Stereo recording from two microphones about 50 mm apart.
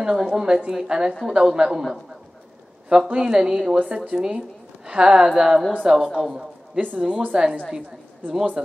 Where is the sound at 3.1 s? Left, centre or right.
Centre.